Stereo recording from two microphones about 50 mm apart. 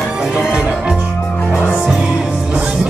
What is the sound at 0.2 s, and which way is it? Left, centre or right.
Music, centre.